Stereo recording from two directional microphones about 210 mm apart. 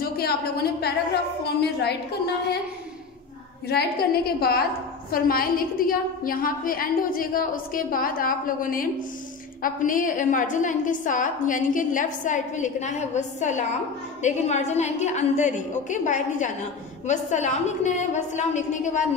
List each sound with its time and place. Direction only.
0.0 s a woman's voice: 50° left (ahead or behind)
3.6 s a woman's voice: 50° left (ahead or behind)